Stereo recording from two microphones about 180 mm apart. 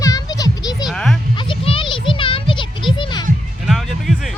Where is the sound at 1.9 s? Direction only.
30° left (ahead or behind).